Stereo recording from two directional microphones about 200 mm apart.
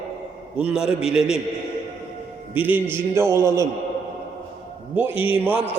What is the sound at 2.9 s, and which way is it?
Speech, 10° right (ahead or behind).